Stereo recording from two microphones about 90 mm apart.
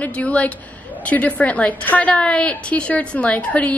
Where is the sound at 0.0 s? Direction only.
15° left (ahead or behind).